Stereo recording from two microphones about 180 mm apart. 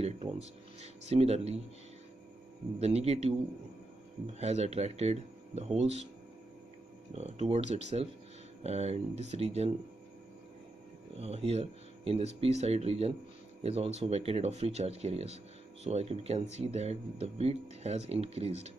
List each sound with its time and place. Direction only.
0.7 s speech: 35° right (ahead or behind)
2.8 s speech: 35° right (ahead or behind)
7.2 s speech: 35° right (ahead or behind)
11.1 s speech: 35° right (ahead or behind)